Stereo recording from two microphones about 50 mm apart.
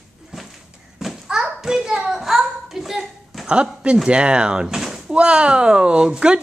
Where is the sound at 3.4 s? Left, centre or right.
Right.